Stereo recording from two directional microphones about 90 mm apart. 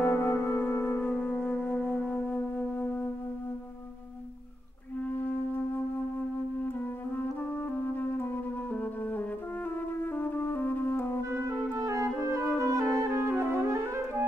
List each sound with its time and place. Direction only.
0.0 s music: 20° left (ahead or behind)
8.7 s music: 20° left (ahead or behind)
11.2 s music: 35° right (ahead or behind)